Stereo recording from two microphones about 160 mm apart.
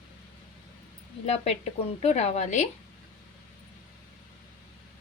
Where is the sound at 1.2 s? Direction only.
40° left (ahead or behind).